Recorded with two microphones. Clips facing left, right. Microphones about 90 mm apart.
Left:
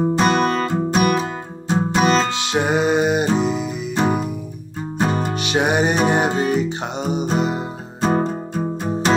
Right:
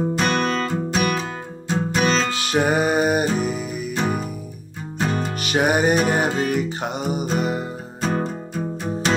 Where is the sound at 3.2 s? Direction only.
30° left (ahead or behind).